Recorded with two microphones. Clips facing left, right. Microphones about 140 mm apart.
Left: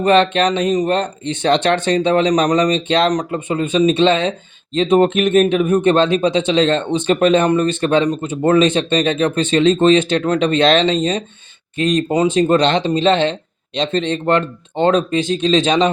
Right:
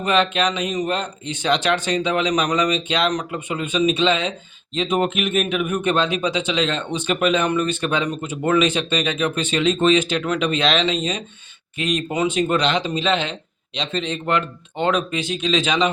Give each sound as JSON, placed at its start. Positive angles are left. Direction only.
{"t": 0.3, "sound": "speech", "side_deg": 50}
{"t": 4.8, "sound": "speech", "side_deg": 35}
{"t": 15.4, "sound": "speech", "side_deg": 45}